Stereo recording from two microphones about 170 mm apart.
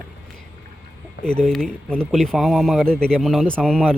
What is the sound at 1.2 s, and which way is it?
Speech, 5° left (ahead or behind).